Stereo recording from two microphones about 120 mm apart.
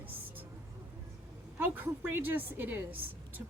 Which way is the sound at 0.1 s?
15° right (ahead or behind).